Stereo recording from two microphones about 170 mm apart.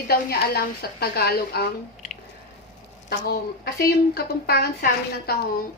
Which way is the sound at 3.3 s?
60° left (ahead or behind).